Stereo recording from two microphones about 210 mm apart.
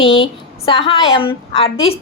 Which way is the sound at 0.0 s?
25° left (ahead or behind).